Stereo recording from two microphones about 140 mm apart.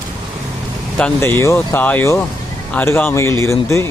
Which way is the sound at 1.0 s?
10° left (ahead or behind).